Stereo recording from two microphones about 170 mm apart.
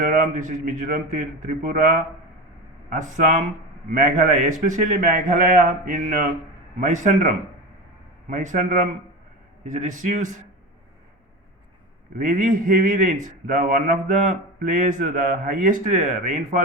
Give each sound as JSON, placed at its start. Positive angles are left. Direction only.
{"t": 0.0, "sound": "a man's voice", "side_deg": -50}
{"t": 2.9, "sound": "a man's voice", "side_deg": -45}
{"t": 12.1, "sound": "a man's voice", "side_deg": -50}